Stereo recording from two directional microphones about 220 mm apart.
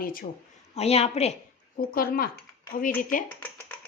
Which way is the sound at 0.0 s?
40° left (ahead or behind).